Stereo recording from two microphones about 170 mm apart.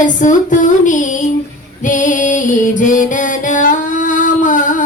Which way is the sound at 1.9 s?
50° left (ahead or behind).